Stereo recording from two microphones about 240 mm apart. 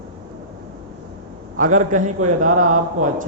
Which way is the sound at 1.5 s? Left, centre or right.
Right.